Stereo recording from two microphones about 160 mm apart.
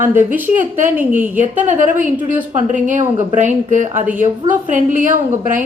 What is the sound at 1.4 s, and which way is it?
Speech, 50° right (ahead or behind).